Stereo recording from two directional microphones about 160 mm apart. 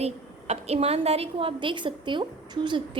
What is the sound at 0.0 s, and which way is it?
A woman's voice, 40° right (ahead or behind).